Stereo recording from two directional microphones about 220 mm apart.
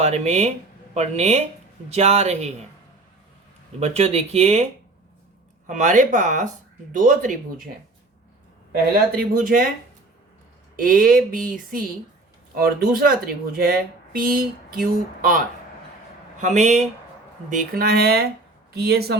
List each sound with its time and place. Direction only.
0.0 s speech: 30° right (ahead or behind)
3.8 s speech: 30° right (ahead or behind)
5.6 s speech: 35° right (ahead or behind)
8.7 s speech: 45° right (ahead or behind)
10.8 s speech: 40° right (ahead or behind)